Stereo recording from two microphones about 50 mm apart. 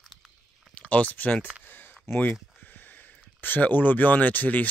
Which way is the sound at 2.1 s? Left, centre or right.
Left.